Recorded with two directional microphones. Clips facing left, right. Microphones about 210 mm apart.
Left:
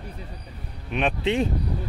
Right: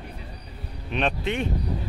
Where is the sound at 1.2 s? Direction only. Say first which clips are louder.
Left 4 dB; 30° left (ahead or behind).